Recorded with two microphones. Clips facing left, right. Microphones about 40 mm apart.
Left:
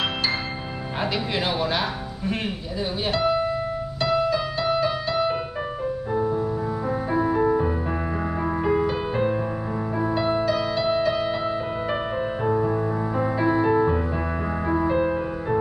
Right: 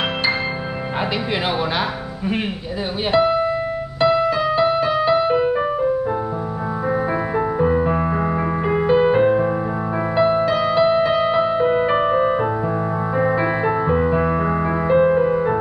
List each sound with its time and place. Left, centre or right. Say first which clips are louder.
3.1 s music: right 6 dB; right
7.3 s music: right 3 dB; right